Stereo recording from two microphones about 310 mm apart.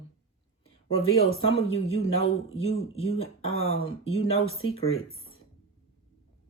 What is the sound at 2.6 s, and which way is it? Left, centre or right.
Speech, centre.